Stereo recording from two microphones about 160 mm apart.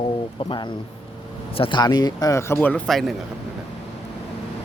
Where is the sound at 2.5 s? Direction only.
5° left (ahead or behind).